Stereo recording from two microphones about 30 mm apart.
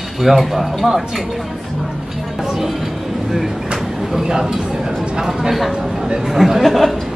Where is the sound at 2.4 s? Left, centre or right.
Centre.